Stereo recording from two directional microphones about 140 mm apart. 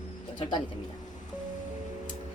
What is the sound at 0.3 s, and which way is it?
Speech, 35° left (ahead or behind).